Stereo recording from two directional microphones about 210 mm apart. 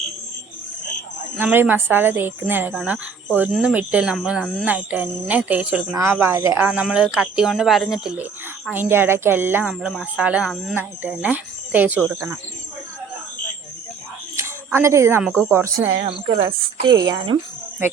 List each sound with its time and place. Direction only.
1.4 s speech: 10° right (ahead or behind)
14.3 s speech: 10° right (ahead or behind)
15.9 s a woman's voice: 30° right (ahead or behind)
17.0 s a woman's voice: 20° right (ahead or behind)